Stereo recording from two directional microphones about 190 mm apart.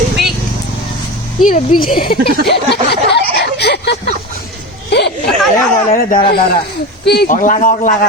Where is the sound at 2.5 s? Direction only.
60° left (ahead or behind).